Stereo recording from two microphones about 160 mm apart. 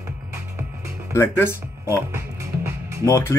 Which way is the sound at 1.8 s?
15° right (ahead or behind).